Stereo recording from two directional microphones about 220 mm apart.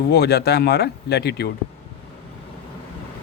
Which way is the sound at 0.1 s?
45° left (ahead or behind).